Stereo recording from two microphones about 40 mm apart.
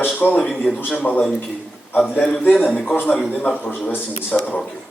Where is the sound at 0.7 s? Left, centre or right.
Left.